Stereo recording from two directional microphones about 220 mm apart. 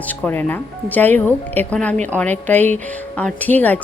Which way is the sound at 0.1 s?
10° left (ahead or behind).